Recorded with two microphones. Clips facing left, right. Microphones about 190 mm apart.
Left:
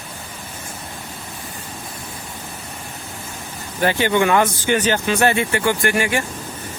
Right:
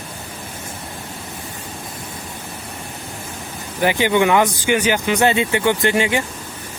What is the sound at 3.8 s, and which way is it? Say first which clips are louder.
Speech: right 1 dB; 15° right (ahead or behind).